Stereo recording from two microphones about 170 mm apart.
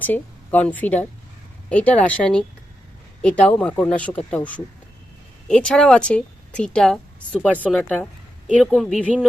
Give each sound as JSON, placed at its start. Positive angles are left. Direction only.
{"t": 0.0, "sound": "a woman's voice", "side_deg": 10}